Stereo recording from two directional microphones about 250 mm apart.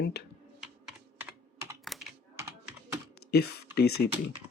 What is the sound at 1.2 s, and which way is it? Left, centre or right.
Computer keyboard, centre.